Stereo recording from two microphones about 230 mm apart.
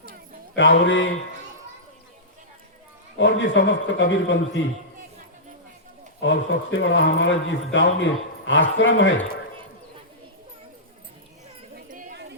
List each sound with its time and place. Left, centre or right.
0.8 s speech: left
3.2 s speech: left
6.1 s speech: left
11.9 s chatter: right